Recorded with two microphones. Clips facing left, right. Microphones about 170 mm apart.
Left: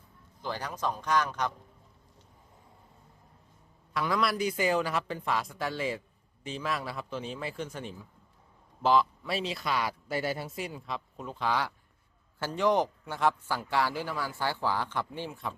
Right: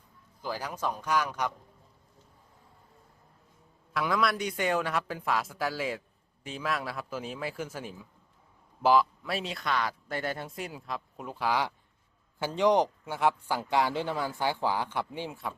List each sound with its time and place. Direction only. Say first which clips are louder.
0.4 s speech: even; 5° right (ahead or behind)
3.9 s speech: right 1 dB; centre (ahead or behind)